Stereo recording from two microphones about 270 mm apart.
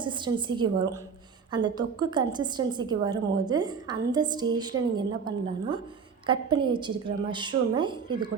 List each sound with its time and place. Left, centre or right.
0.0 s a woman's voice: centre